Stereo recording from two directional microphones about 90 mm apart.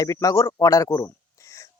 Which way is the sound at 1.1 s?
35° left (ahead or behind).